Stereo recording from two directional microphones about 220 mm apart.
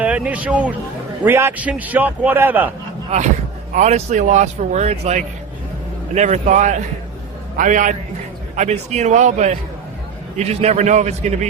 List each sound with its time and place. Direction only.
0.0 s a man's voice: 5° right (ahead or behind)
3.8 s a man's voice: 30° right (ahead or behind)